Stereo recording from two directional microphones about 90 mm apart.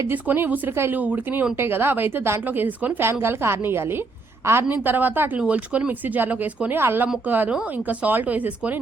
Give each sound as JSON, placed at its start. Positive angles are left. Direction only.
{"t": 0.1, "sound": "speech", "side_deg": -20}